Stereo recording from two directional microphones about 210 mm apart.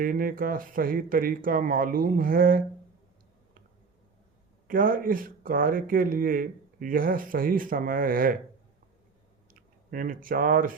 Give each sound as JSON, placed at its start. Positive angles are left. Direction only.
{"t": 0.0, "sound": "speech", "side_deg": -40}
{"t": 4.7, "sound": "speech", "side_deg": -40}
{"t": 9.5, "sound": "speech", "side_deg": -40}